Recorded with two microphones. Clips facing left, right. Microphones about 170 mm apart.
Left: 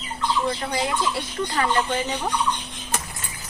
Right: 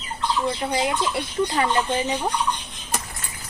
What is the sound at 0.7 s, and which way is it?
Speech, 20° right (ahead or behind).